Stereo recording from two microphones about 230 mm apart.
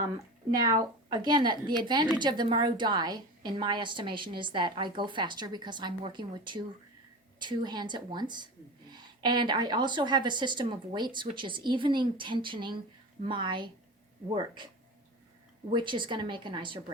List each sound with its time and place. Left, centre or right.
0.6 s a woman's voice: centre
15.7 s a woman's voice: right